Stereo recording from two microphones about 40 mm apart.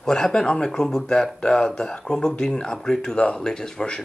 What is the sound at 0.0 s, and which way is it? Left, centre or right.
Speech, centre.